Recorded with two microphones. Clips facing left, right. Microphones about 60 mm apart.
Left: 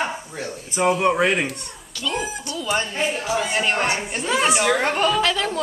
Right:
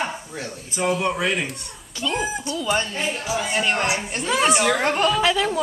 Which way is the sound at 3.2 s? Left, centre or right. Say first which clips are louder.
Right 1 dB; centre.